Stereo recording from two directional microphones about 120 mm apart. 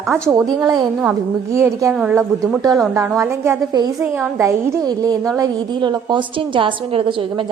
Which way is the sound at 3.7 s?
35° right (ahead or behind).